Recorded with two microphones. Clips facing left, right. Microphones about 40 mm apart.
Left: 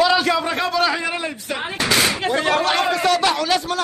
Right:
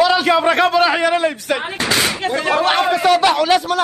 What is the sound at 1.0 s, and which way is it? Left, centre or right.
Speech, right.